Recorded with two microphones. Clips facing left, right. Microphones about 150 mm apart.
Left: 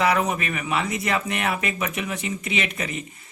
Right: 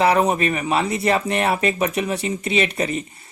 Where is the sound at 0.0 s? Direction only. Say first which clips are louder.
Right 5 dB; 30° right (ahead or behind).